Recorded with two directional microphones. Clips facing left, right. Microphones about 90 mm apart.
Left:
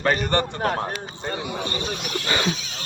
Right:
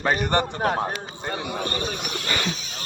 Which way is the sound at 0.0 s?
15° right (ahead or behind).